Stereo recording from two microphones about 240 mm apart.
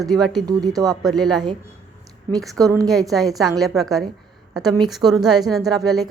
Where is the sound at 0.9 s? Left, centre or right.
Centre.